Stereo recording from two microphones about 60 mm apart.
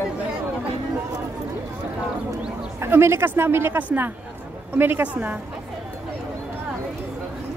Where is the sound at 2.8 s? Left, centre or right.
Right.